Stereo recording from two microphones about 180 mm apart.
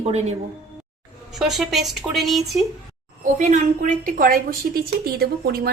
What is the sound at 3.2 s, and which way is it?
A woman's voice, 40° right (ahead or behind).